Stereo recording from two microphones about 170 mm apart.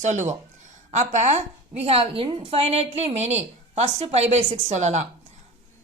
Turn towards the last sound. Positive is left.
turn(degrees=-45)  # may be behind; listen again after turning